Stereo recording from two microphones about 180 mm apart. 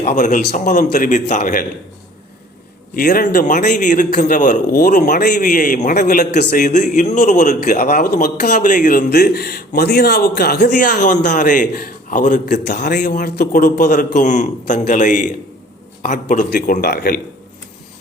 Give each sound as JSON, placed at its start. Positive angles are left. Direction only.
{"t": 0.0, "sound": "a man's voice", "side_deg": 45}
{"t": 2.9, "sound": "a man's voice", "side_deg": 50}
{"t": 9.0, "sound": "a man's voice", "side_deg": 60}
{"t": 12.6, "sound": "a man's voice", "side_deg": 65}